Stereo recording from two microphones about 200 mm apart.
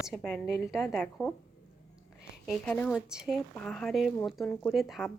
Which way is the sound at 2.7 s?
5° left (ahead or behind).